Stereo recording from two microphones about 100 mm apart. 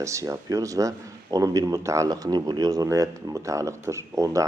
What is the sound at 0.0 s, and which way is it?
Speech, 30° right (ahead or behind).